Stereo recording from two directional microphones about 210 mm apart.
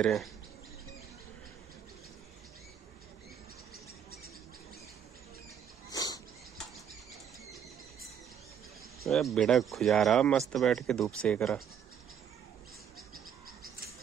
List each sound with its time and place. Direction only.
0.0 s speech: centre (ahead or behind)
5.9 s a sound: 20° left (ahead or behind)
9.1 s speech: centre (ahead or behind)